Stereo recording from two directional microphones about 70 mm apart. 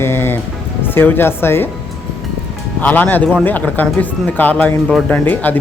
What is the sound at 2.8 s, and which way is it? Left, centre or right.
Speech, left.